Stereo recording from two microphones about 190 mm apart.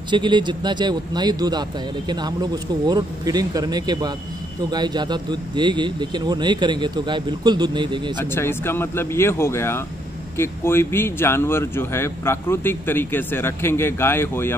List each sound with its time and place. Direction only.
0.1 s speech: 25° right (ahead or behind)
8.2 s speech: 10° left (ahead or behind)